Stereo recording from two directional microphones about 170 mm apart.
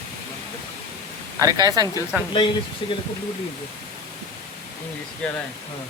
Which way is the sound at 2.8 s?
30° left (ahead or behind).